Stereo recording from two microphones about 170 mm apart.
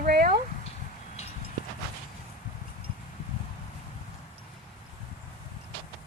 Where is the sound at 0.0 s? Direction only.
60° right (ahead or behind).